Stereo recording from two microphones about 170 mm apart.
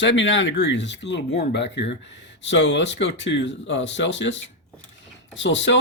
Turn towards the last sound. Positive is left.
turn(degrees=90)